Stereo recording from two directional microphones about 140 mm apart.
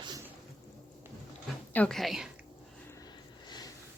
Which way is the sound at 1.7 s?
5° left (ahead or behind).